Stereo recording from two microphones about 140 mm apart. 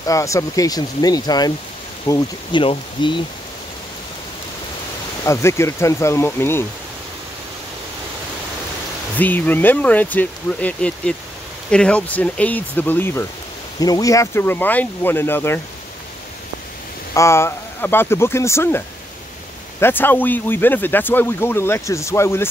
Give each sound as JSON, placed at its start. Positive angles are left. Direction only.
{"t": 0.0, "sound": "speech", "side_deg": 20}
{"t": 2.1, "sound": "speech", "side_deg": 20}
{"t": 2.5, "sound": "speech", "side_deg": 35}
{"t": 5.2, "sound": "speech", "side_deg": 20}
{"t": 9.2, "sound": "speech", "side_deg": 10}
{"t": 17.1, "sound": "speech", "side_deg": 20}
{"t": 19.8, "sound": "speech", "side_deg": 15}